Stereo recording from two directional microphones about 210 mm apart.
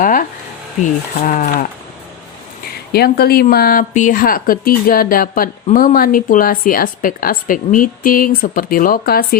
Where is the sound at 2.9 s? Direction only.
45° left (ahead or behind).